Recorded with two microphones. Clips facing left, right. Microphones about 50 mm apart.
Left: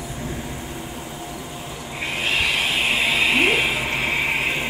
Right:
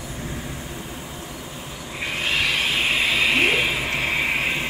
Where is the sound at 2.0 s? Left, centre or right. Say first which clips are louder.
Left 1 dB; centre.